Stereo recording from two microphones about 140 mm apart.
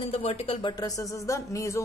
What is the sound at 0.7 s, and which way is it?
Speech, 25° left (ahead or behind).